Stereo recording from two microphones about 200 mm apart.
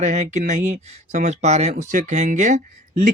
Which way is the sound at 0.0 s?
35° right (ahead or behind).